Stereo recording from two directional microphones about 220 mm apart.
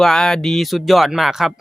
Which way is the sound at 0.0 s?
Centre (ahead or behind).